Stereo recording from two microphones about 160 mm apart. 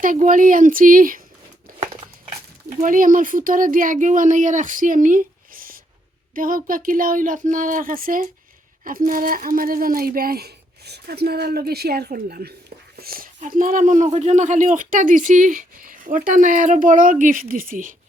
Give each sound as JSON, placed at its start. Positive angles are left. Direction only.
{"t": 0.0, "sound": "speech", "side_deg": -55}
{"t": 2.8, "sound": "speech", "side_deg": -55}